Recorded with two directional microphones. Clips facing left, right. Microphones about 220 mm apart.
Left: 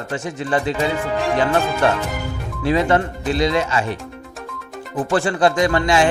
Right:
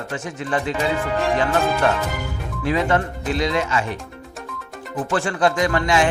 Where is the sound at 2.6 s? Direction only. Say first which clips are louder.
Left 3 dB; 30° left (ahead or behind).